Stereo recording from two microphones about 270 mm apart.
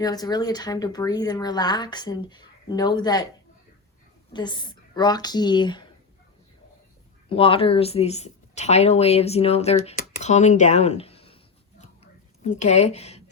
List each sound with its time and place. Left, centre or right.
0.0 s speech: centre
4.3 s speech: centre
7.3 s speech: centre
12.4 s a woman's voice: left